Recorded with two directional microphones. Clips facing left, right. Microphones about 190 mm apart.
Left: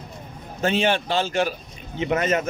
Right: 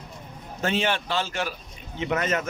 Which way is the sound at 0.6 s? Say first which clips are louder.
Left 4 dB; 25° left (ahead or behind).